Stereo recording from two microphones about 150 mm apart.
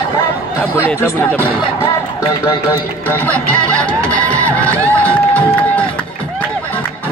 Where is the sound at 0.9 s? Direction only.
15° left (ahead or behind).